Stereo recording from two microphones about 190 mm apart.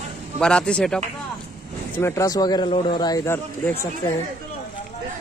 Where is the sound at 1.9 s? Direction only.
15° left (ahead or behind).